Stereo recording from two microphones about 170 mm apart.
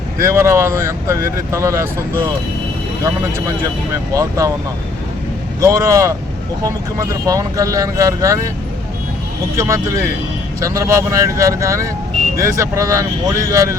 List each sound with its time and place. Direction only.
0.2 s speech: 15° right (ahead or behind)
4.1 s speech: 20° right (ahead or behind)
5.5 s speech: 20° right (ahead or behind)
9.6 s speech: 15° right (ahead or behind)